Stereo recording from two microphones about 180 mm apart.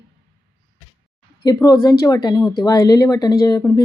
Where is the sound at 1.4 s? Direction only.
20° left (ahead or behind).